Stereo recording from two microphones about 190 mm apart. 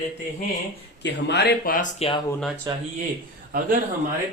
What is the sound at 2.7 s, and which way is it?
Speech, 20° right (ahead or behind).